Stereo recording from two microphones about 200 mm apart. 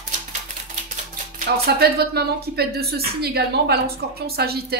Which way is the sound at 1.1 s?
45° right (ahead or behind).